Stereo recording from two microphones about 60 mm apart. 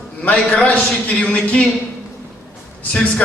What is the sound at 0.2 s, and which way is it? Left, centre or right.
A man's voice, centre.